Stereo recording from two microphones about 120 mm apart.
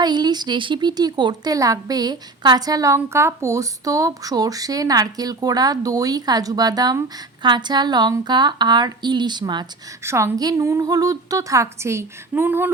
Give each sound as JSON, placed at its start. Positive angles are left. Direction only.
{"t": 0.0, "sound": "a woman's voice", "side_deg": -35}
{"t": 10.0, "sound": "a woman's voice", "side_deg": -20}